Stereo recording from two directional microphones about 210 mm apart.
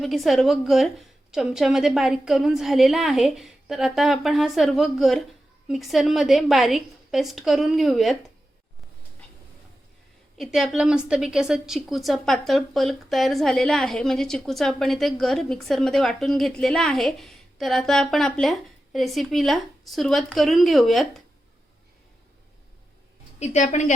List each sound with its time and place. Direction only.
0.0 s a woman's voice: centre (ahead or behind)
10.3 s a woman's voice: centre (ahead or behind)
23.4 s a woman's voice: 35° left (ahead or behind)